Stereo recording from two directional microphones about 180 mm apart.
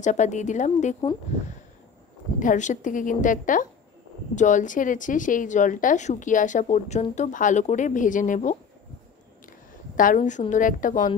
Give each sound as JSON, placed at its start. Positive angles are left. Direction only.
{"t": 0.0, "sound": "a woman's voice", "side_deg": 40}
{"t": 2.3, "sound": "speech", "side_deg": 45}
{"t": 9.9, "sound": "speech", "side_deg": 50}